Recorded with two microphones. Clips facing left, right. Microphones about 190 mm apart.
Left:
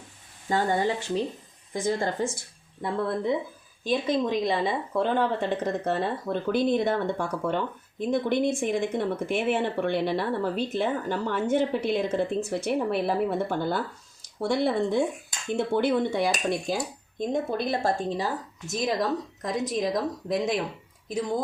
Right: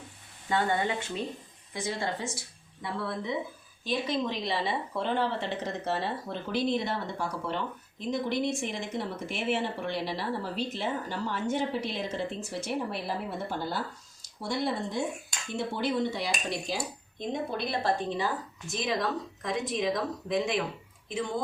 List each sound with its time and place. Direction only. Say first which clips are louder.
0.4 s speech: left 3 dB; 40° left (ahead or behind)